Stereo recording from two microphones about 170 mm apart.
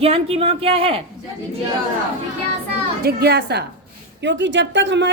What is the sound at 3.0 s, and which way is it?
Speech, 65° right (ahead or behind).